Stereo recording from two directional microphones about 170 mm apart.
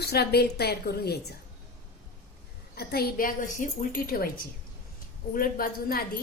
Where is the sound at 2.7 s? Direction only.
65° left (ahead or behind).